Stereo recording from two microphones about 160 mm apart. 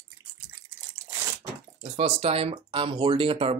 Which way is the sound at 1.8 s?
40° right (ahead or behind).